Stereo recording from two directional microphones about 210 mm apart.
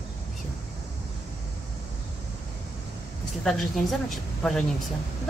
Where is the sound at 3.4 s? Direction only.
Centre (ahead or behind).